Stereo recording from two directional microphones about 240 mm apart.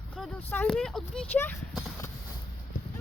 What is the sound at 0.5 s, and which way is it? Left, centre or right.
Speech, centre.